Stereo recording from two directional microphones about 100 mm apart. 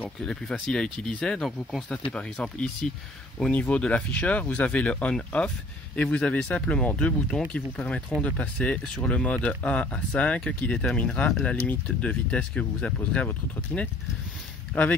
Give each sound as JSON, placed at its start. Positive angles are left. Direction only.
{"t": 0.2, "sound": "speech", "side_deg": 5}